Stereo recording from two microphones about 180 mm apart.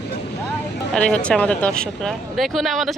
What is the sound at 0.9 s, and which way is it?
Speech, 5° left (ahead or behind).